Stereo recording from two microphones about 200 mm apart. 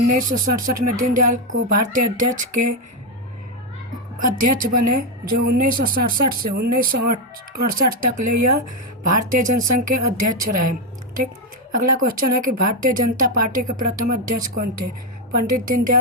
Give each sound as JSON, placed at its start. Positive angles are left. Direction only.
{"t": 0.1, "sound": "speech", "side_deg": -40}
{"t": 4.4, "sound": "speech", "side_deg": -45}
{"t": 11.7, "sound": "speech", "side_deg": -45}